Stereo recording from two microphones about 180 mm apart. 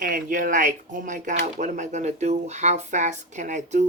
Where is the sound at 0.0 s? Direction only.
50° right (ahead or behind).